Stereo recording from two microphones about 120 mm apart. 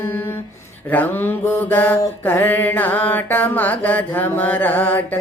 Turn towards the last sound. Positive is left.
turn(degrees=15)  # may be behind; listen again after turning